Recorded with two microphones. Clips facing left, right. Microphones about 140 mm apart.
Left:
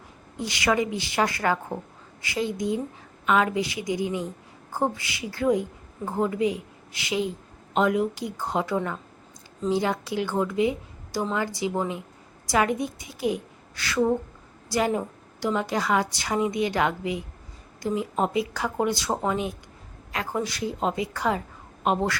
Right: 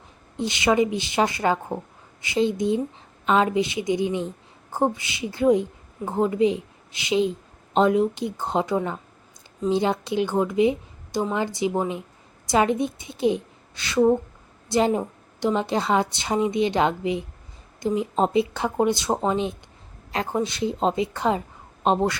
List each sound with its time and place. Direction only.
0.3 s a woman's voice: 20° right (ahead or behind)